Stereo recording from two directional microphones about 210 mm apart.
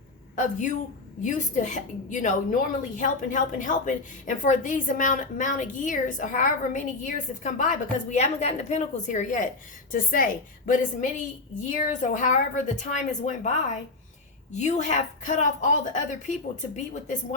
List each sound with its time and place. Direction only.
0.3 s a woman's voice: 35° left (ahead or behind)